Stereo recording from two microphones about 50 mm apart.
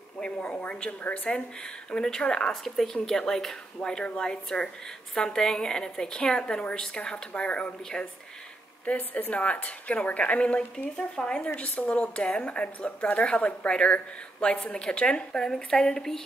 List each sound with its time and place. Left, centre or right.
0.2 s a woman's voice: centre
3.8 s a woman's voice: centre
8.8 s a woman's voice: left
11.0 s a woman's voice: centre
11.4 s a woman's voice: left; by 16.3 s centre